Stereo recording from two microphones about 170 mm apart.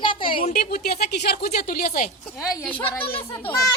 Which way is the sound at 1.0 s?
75° left (ahead or behind).